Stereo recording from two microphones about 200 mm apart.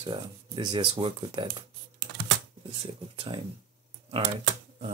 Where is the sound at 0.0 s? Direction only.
25° right (ahead or behind).